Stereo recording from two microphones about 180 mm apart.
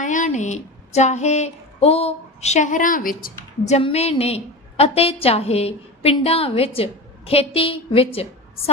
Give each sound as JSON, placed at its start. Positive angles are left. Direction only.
{"t": 0.0, "sound": "speech", "side_deg": 45}
{"t": 3.8, "sound": "a woman's voice", "side_deg": 35}